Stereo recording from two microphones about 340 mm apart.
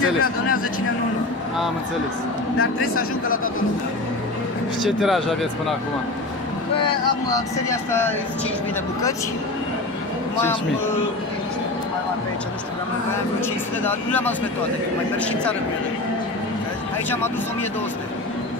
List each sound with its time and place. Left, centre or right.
0.0 s speech: left
4.8 s speech: centre
7.2 s speech: centre
13.8 s speech: centre